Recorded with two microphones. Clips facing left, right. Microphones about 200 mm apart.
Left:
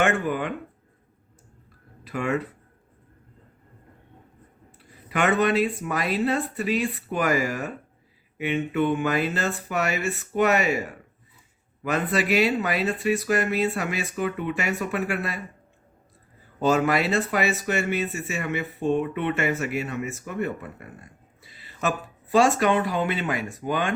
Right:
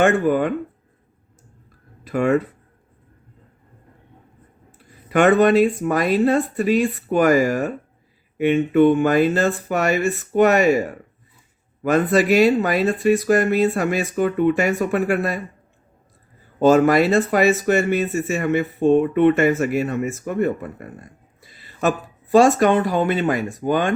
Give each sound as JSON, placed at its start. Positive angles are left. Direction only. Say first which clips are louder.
{"t": 0.0, "sound": "speech", "louder": "right 7 dB", "side_deg": -40}
{"t": 2.0, "sound": "speech", "louder": "right 8 dB", "side_deg": -45}
{"t": 5.0, "sound": "speech", "louder": "right 8 dB", "side_deg": -45}
{"t": 16.6, "sound": "speech", "louder": "right 8 dB", "side_deg": -45}